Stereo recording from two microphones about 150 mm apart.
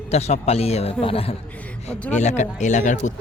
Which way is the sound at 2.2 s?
50° left (ahead or behind).